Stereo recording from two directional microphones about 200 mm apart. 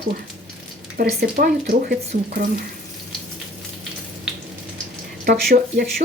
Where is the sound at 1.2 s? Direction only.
45° right (ahead or behind).